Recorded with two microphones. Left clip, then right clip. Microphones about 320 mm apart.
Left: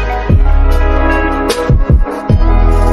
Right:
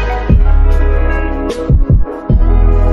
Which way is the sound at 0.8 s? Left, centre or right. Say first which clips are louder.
Left 7 dB; centre.